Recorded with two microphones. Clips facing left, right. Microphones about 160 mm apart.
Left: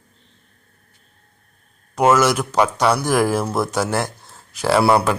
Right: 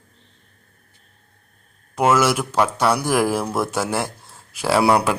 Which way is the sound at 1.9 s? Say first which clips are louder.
Left 2 dB; 5° right (ahead or behind).